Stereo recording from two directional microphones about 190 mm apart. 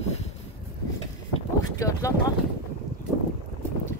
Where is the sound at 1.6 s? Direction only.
15° left (ahead or behind).